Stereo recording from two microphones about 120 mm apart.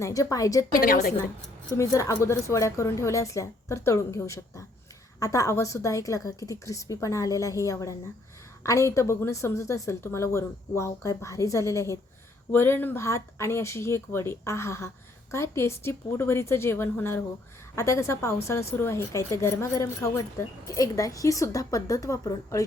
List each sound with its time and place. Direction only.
0.0 s a woman's voice: 30° left (ahead or behind)
1.7 s a woman's voice: 30° left (ahead or behind)